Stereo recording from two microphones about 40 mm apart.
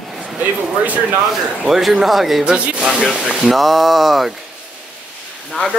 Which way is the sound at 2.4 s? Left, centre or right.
Right.